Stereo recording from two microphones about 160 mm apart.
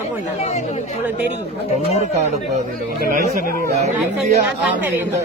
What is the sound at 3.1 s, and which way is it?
Speech, 55° right (ahead or behind).